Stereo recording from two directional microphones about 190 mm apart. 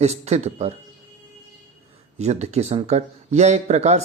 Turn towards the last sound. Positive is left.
turn(degrees=-35)  # may be behind; listen again after turning